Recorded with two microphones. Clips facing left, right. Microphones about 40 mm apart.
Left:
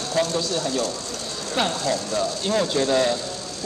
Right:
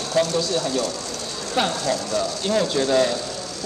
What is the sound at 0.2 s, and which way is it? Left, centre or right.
Speech, left.